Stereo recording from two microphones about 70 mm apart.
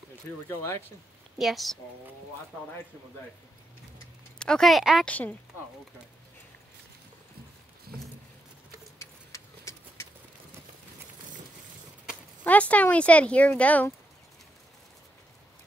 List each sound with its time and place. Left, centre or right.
1.4 s speech: centre
4.4 s speech: centre
5.0 s speech: left
9.0 s vehicle: left
12.4 s speech: left